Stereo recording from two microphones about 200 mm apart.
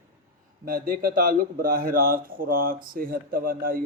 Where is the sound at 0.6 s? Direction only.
45° right (ahead or behind).